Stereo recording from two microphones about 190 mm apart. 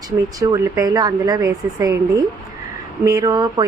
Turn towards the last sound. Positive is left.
turn(degrees=-20)  # may be behind; listen again after turning